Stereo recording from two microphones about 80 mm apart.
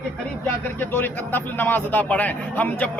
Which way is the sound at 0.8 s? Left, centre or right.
Left.